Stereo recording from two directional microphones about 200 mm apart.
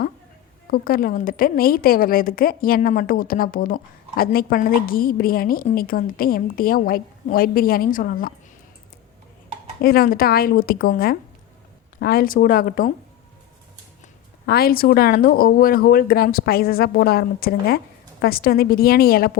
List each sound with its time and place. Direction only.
0.7 s a woman's voice: 45° left (ahead or behind)
9.8 s a woman's voice: 45° left (ahead or behind)
14.4 s a woman's voice: 50° left (ahead or behind)